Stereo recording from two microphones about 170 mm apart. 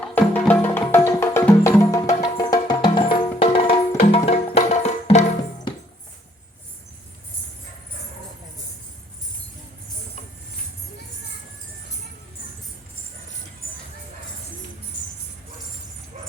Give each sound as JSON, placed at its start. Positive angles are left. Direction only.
{"t": 0.1, "sound": "music", "side_deg": 10}